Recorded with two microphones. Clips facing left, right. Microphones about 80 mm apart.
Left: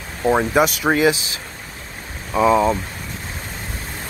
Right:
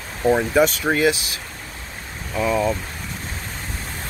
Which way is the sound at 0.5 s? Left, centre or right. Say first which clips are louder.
Left 1 dB; centre.